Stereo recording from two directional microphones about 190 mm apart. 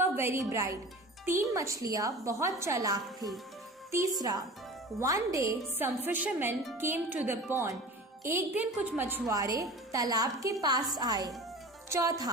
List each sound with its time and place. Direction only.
0.0 s a woman's voice: 15° right (ahead or behind)
4.9 s a woman's voice: 15° right (ahead or behind)